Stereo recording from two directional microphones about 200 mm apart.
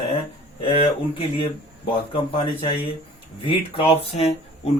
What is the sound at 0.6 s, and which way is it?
Speech, 25° left (ahead or behind).